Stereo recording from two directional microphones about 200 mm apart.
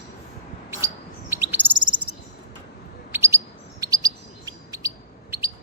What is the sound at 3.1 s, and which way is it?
Chirp, 15° right (ahead or behind).